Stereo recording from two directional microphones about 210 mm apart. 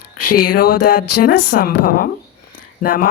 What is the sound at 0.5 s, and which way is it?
A woman's voice, 45° left (ahead or behind).